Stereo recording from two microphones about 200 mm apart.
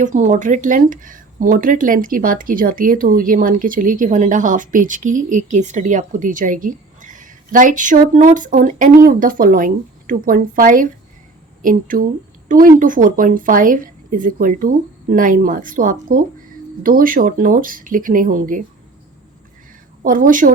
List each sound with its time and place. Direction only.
0.0 s a woman's voice: 40° right (ahead or behind)
20.0 s speech: 45° right (ahead or behind)